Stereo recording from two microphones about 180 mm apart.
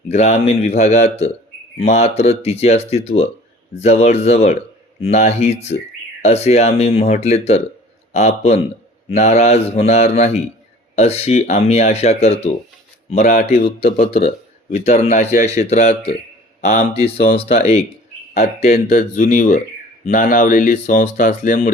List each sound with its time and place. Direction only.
0.1 s speech: 40° left (ahead or behind)
18.7 s speech: 55° left (ahead or behind)